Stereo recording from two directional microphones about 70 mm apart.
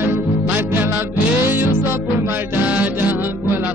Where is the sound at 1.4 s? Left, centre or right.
Right.